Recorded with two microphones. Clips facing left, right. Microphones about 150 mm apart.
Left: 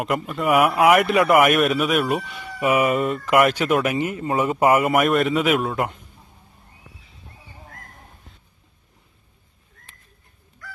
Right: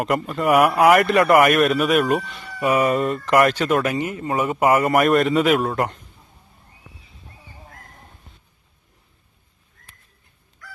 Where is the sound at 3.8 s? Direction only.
20° left (ahead or behind).